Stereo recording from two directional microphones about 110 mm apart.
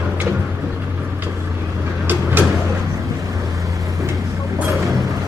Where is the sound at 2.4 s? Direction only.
20° right (ahead or behind).